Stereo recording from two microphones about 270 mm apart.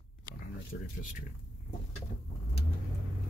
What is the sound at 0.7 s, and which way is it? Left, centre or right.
Speech, left.